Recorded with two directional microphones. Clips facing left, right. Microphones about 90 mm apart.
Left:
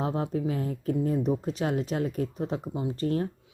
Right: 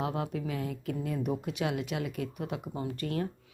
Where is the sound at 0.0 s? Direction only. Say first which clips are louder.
Left 4 dB; 35° left (ahead or behind).